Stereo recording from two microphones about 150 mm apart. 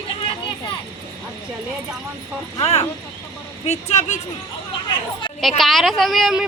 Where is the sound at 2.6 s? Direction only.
45° left (ahead or behind).